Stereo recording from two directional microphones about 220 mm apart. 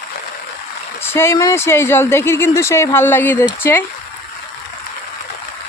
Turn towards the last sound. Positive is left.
turn(degrees=10)  # may be behind; listen again after turning